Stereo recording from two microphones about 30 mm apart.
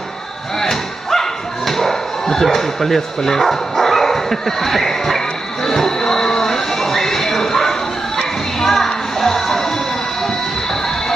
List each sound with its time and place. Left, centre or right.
0.6 s thump: centre
2.4 s dog: centre
8.6 s music: centre